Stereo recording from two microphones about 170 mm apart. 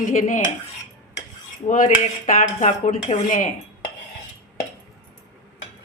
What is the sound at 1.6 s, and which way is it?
Speech, 50° left (ahead or behind).